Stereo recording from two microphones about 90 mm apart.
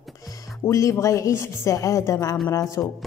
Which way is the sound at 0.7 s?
35° left (ahead or behind).